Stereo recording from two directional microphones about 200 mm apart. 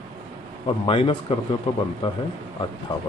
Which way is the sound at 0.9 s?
25° left (ahead or behind).